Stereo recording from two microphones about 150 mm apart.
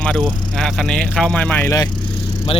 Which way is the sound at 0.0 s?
5° left (ahead or behind).